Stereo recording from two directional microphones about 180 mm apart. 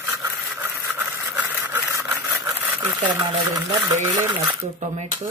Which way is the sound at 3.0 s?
20° right (ahead or behind).